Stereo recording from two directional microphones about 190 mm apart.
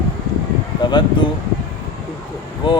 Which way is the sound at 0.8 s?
25° left (ahead or behind).